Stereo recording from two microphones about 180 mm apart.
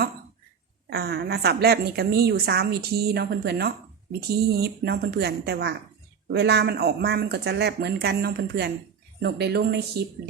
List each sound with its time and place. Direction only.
0.9 s a woman's voice: 65° right (ahead or behind)